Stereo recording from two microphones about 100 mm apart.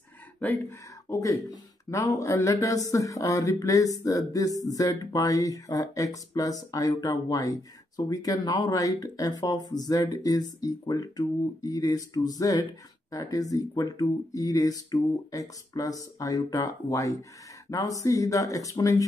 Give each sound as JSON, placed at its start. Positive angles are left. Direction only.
{"t": 0.4, "sound": "speech", "side_deg": 20}